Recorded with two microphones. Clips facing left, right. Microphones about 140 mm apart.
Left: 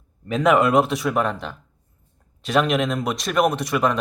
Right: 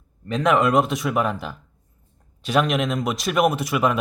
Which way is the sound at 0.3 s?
5° left (ahead or behind).